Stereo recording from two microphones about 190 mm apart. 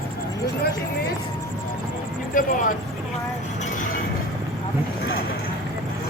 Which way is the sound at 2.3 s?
45° left (ahead or behind).